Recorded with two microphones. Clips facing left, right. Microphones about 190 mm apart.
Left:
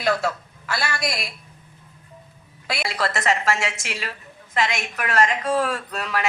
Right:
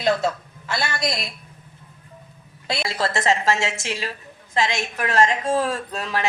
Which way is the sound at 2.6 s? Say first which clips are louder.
Right 1 dB; 25° right (ahead or behind).